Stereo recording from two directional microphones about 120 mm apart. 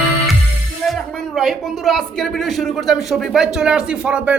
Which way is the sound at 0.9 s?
Centre (ahead or behind).